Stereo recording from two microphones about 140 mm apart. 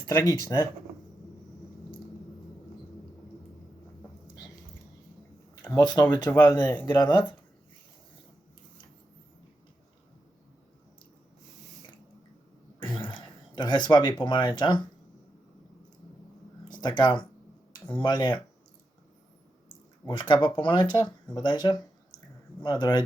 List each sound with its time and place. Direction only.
0.1 s speech: 20° left (ahead or behind)
5.6 s speech: 30° left (ahead or behind)
6.4 s speech: 20° left (ahead or behind)
6.8 s speech: 30° left (ahead or behind)
12.8 s a sound: 35° left (ahead or behind)
16.6 s speech: 30° left (ahead or behind)
20.1 s speech: 35° left (ahead or behind)
22.8 s speech: 30° left (ahead or behind)